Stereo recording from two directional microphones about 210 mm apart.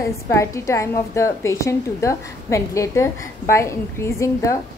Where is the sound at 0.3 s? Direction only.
15° left (ahead or behind).